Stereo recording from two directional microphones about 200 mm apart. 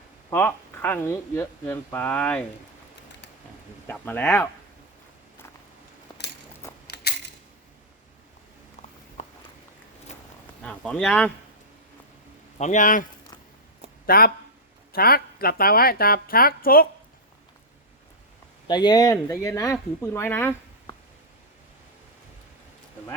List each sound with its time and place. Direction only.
0.3 s speech: 10° left (ahead or behind)
3.8 s speech: 10° left (ahead or behind)
6.8 s a sound: 55° left (ahead or behind)
9.2 s walk: 35° left (ahead or behind)
10.6 s speech: 5° left (ahead or behind)
12.5 s a man's voice: 35° left (ahead or behind)
14.1 s a woman's voice: 45° left (ahead or behind)
18.7 s speech: 20° left (ahead or behind)